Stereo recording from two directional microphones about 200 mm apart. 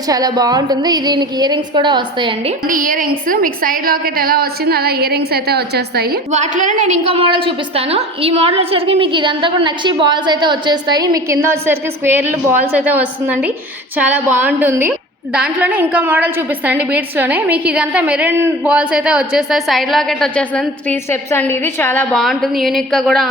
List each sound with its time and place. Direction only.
0.1 s a woman's voice: 20° right (ahead or behind)
2.6 s a woman's voice: 45° right (ahead or behind)
6.3 s a woman's voice: 35° right (ahead or behind); by 23.3 s centre (ahead or behind)